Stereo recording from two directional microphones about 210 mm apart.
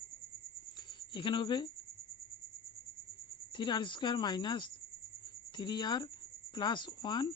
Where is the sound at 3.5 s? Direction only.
20° left (ahead or behind).